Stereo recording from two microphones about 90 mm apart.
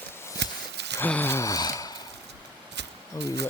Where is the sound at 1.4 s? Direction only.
40° left (ahead or behind).